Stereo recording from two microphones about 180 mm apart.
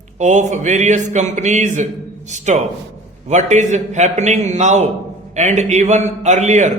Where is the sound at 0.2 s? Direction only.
40° right (ahead or behind).